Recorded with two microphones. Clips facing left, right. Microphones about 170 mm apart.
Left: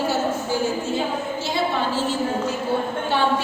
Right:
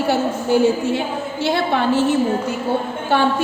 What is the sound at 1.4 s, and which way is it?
Speech, 65° right (ahead or behind).